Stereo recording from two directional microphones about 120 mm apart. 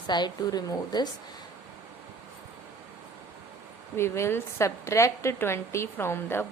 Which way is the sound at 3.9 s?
20° left (ahead or behind).